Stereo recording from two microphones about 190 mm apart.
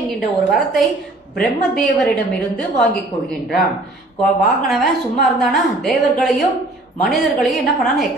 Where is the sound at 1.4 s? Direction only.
5° left (ahead or behind).